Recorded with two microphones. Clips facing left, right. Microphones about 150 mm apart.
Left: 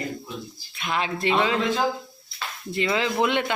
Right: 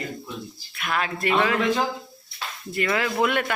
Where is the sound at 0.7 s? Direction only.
25° left (ahead or behind).